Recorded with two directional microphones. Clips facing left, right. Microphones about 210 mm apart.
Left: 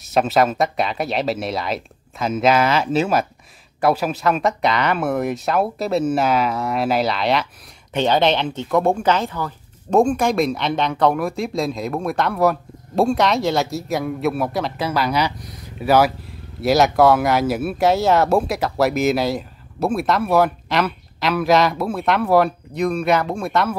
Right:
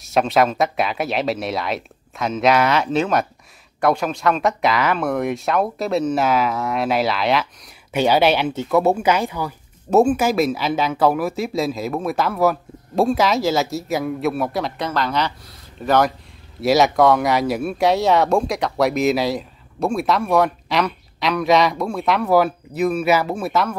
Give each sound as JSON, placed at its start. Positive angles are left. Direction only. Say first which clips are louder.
{"t": 0.0, "sound": "speech", "louder": "even", "side_deg": 0}